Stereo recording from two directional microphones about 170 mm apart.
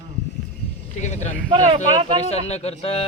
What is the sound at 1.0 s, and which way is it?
Speech, 45° left (ahead or behind).